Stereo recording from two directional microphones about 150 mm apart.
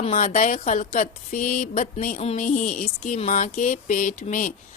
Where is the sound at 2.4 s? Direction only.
55° left (ahead or behind).